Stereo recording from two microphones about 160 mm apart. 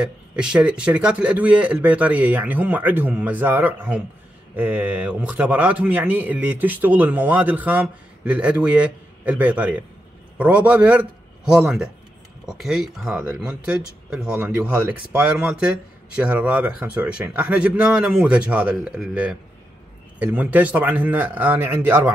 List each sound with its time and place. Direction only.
0.0 s a man's voice: 5° right (ahead or behind)